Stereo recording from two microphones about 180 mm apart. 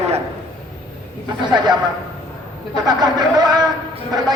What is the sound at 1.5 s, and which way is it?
Speech, 25° right (ahead or behind).